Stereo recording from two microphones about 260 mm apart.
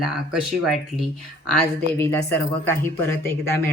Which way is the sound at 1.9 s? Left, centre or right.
Centre.